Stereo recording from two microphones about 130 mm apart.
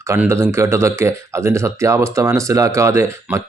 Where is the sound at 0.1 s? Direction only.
20° right (ahead or behind).